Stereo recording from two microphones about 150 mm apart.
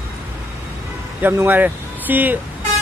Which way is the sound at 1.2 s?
10° right (ahead or behind).